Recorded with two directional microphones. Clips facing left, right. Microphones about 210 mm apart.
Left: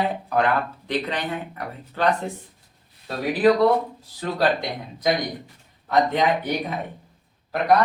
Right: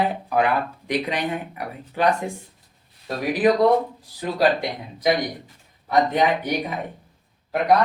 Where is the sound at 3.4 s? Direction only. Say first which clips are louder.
Even; 15° right (ahead or behind).